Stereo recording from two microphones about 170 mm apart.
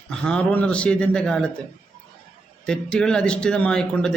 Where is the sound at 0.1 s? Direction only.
5° left (ahead or behind).